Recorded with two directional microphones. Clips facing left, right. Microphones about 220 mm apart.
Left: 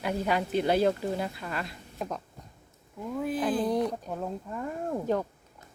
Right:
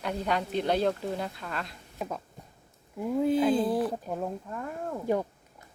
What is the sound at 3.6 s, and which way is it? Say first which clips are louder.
Speech: even; 5° right (ahead or behind).